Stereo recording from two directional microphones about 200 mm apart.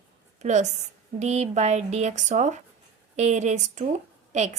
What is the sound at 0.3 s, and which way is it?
A woman's voice, 35° right (ahead or behind).